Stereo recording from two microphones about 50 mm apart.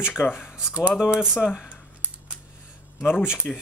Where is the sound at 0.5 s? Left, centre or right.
Right.